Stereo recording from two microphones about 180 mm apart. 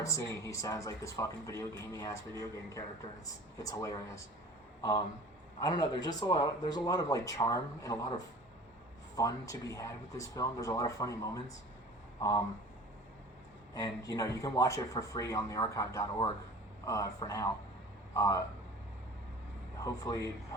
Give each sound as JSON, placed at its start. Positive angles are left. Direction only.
{"t": 0.0, "sound": "a man's voice", "side_deg": 15}
{"t": 9.1, "sound": "speech", "side_deg": 20}
{"t": 13.7, "sound": "speech", "side_deg": 20}
{"t": 19.8, "sound": "speech", "side_deg": 20}